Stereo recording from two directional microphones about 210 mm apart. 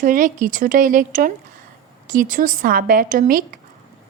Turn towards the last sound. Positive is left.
turn(degrees=-40)  # may be behind; listen again after turning